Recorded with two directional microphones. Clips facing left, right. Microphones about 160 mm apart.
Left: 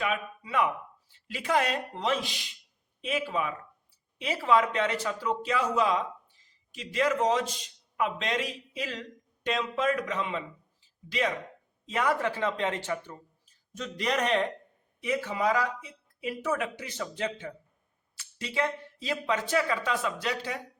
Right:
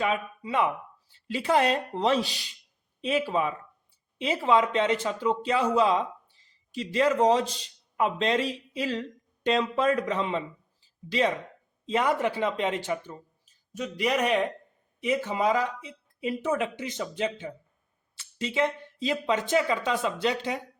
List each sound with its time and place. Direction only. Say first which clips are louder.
0.0 s a man's voice: right 3 dB; 30° right (ahead or behind); by 14.5 s 10° right (ahead or behind)
15.0 s speech: right 3 dB; 20° right (ahead or behind)